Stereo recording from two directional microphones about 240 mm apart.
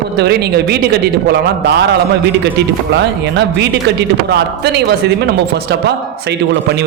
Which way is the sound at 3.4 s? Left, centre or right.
Right.